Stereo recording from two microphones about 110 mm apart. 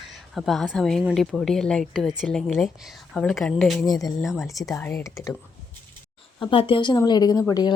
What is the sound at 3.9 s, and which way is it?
Speech, 35° left (ahead or behind).